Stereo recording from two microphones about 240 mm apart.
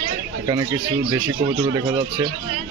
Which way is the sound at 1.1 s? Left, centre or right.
Centre.